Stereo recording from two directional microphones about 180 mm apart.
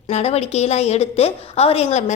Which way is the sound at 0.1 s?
35° left (ahead or behind).